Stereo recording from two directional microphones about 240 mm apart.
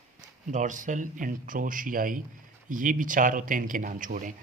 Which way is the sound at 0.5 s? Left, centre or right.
Right.